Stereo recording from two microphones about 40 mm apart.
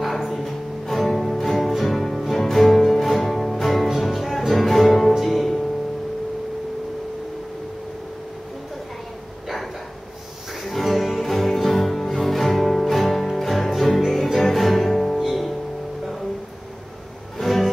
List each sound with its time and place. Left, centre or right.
0.0 s music: centre
10.6 s music: centre
17.4 s music: centre